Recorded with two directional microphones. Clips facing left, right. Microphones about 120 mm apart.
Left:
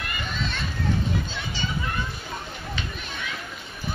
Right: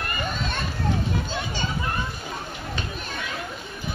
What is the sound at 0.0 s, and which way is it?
Children playing, 45° right (ahead or behind).